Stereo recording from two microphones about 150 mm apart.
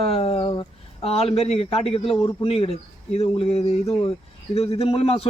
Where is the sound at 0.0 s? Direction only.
40° left (ahead or behind).